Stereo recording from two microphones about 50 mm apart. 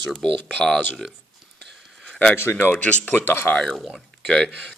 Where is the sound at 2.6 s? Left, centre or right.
Left.